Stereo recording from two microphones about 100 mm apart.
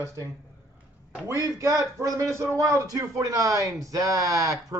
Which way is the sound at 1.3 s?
30° right (ahead or behind).